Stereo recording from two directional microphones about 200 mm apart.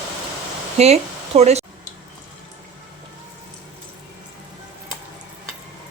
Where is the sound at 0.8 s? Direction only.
30° right (ahead or behind).